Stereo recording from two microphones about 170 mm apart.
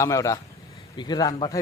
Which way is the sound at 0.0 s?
20° left (ahead or behind).